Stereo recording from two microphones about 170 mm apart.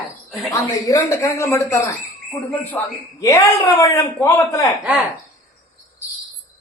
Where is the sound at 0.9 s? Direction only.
20° left (ahead or behind).